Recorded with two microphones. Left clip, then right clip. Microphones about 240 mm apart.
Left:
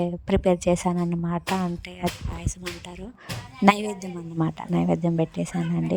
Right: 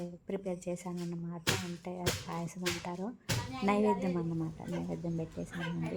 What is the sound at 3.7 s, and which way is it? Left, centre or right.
Speech, left.